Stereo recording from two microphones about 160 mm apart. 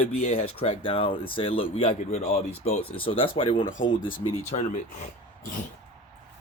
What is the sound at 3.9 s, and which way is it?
Speech, 60° left (ahead or behind).